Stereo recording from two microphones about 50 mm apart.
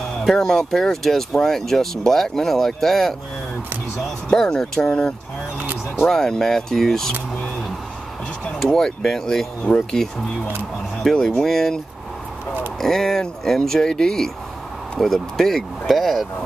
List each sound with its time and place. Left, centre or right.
0.2 s speech: centre
4.3 s speech: centre
4.6 s speech: centre
6.0 s speech: centre
8.5 s speech: centre
9.7 s speech: centre
11.2 s speech: centre
12.8 s speech: centre